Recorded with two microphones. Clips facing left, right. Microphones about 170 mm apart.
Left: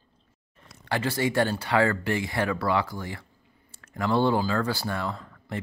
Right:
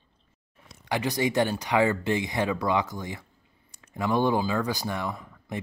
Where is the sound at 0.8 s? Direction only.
15° right (ahead or behind).